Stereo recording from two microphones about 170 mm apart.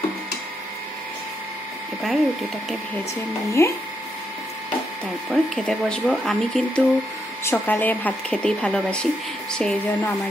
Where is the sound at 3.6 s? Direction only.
15° left (ahead or behind).